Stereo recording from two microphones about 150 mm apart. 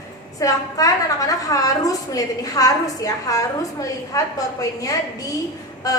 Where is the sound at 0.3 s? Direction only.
20° left (ahead or behind).